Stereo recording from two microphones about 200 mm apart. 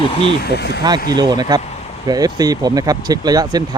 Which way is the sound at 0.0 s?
30° left (ahead or behind).